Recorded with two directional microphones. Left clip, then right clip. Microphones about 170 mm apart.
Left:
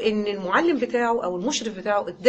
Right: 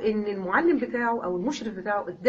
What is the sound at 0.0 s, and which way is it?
A woman's voice, 20° left (ahead or behind).